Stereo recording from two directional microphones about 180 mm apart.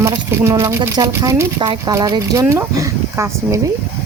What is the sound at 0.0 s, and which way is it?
Speech, 15° right (ahead or behind).